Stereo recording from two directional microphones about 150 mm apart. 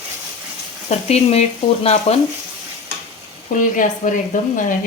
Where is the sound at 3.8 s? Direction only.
60° left (ahead or behind).